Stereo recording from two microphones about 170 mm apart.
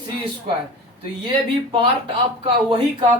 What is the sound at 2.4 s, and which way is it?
Speech, 30° right (ahead or behind).